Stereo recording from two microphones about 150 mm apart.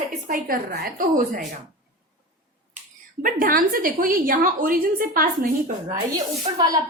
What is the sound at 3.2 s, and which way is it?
A woman's voice, 70° right (ahead or behind).